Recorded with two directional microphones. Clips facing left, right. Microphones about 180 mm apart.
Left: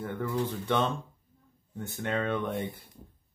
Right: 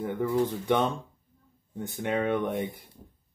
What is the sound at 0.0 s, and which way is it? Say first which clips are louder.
Speech: right 5 dB; 15° right (ahead or behind).